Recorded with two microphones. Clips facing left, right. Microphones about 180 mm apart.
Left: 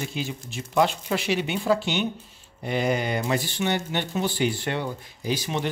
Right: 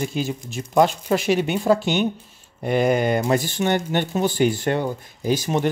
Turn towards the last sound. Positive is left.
turn(degrees=-45)  # may be behind; listen again after turning